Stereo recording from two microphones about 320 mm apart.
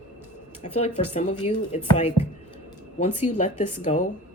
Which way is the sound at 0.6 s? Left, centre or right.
Left.